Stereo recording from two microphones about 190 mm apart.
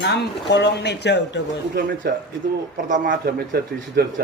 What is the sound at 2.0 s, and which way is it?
Speech, 55° right (ahead or behind).